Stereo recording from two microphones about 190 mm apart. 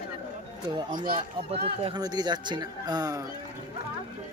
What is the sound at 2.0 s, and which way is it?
A man's voice, 20° right (ahead or behind).